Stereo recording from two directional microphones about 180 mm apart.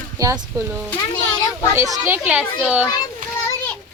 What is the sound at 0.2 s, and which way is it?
Speech, 20° right (ahead or behind).